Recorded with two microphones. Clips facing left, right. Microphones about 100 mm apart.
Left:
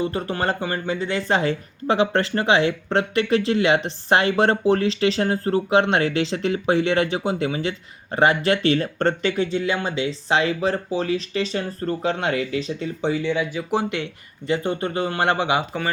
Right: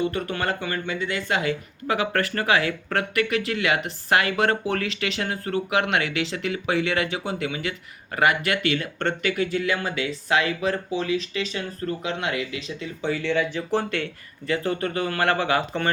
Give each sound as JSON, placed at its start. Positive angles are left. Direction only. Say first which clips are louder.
{"t": 0.0, "sound": "speech", "louder": "left 2 dB", "side_deg": 30}
{"t": 13.0, "sound": "speech", "louder": "left 3 dB", "side_deg": 20}
{"t": 13.2, "sound": "speech", "louder": "left 1 dB", "side_deg": 10}